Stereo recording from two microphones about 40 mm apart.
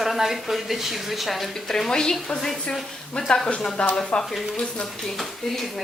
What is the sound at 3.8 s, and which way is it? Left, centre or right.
Speech, left.